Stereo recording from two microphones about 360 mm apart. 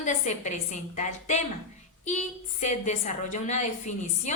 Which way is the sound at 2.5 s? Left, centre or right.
Centre.